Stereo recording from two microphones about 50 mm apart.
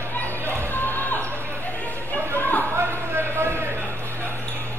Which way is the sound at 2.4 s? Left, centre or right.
Left.